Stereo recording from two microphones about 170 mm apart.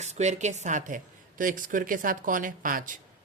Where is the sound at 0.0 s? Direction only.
40° right (ahead or behind).